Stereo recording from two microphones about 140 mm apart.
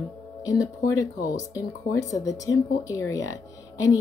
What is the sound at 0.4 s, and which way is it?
Speech, 25° left (ahead or behind).